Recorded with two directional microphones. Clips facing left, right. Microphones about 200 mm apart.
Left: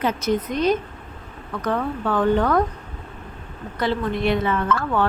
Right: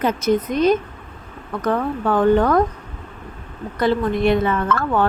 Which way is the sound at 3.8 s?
45° right (ahead or behind).